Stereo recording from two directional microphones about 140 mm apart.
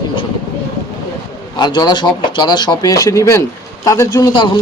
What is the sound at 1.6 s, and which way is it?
Speech, 30° left (ahead or behind).